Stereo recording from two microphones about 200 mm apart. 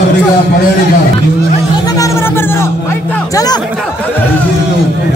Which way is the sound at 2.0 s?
15° left (ahead or behind).